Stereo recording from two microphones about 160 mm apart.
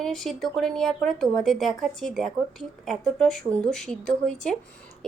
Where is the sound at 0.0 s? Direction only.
Centre (ahead or behind).